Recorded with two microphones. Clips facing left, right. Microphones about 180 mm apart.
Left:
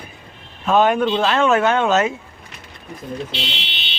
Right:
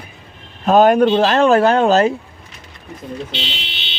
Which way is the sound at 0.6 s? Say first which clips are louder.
Right 5 dB; 40° right (ahead or behind).